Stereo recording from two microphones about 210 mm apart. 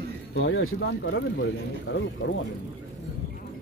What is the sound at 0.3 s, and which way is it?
Speech, 65° left (ahead or behind).